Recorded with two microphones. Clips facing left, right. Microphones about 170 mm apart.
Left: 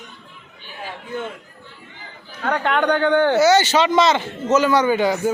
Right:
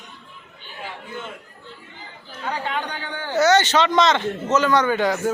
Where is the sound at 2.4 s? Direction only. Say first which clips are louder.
Left 8 dB; 65° left (ahead or behind).